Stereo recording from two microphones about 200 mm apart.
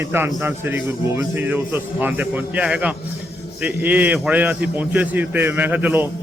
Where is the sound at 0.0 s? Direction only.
10° right (ahead or behind).